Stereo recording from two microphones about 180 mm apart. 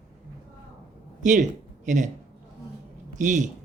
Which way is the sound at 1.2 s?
45° right (ahead or behind).